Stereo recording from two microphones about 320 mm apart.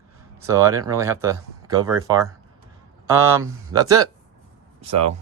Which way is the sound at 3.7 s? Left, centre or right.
Centre.